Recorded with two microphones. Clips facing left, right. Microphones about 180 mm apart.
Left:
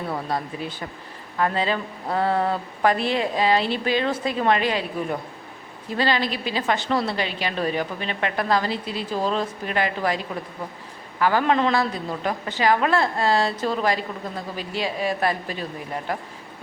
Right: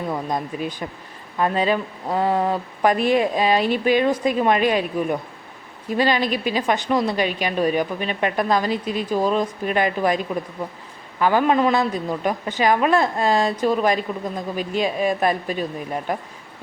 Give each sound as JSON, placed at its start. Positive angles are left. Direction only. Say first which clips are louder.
{"t": 0.3, "sound": "a woman's voice", "louder": "right 3 dB", "side_deg": -15}
{"t": 11.2, "sound": "a woman's voice", "louder": "right 2 dB", "side_deg": -15}